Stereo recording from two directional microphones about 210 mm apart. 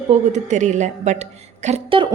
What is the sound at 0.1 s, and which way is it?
A woman's voice, 35° right (ahead or behind).